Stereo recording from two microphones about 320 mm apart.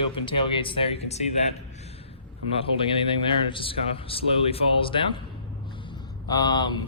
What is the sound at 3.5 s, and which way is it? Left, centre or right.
Speech, centre.